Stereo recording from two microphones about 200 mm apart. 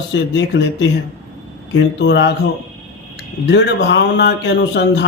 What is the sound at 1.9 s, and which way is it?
Speech, 60° left (ahead or behind).